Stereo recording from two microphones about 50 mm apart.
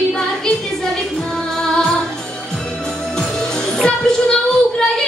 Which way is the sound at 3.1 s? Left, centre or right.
Centre.